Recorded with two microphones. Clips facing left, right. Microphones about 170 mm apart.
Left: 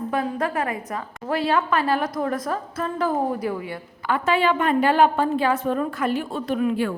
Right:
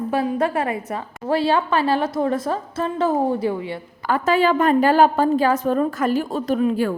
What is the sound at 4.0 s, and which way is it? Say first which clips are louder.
A woman's voice: right 3 dB; 40° right (ahead or behind).